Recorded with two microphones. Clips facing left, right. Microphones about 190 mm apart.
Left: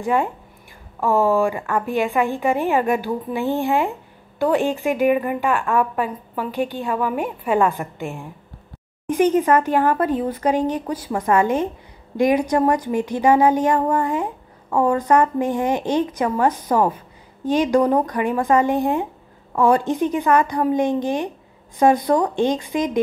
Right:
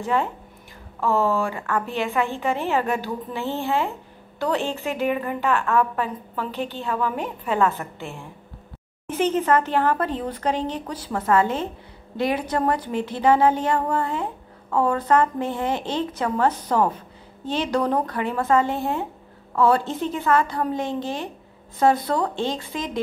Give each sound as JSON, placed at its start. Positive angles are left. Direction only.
{"t": 0.0, "sound": "a woman's voice", "side_deg": 15}